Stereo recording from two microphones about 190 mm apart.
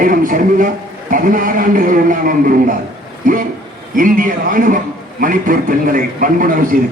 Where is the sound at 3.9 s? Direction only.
45° right (ahead or behind).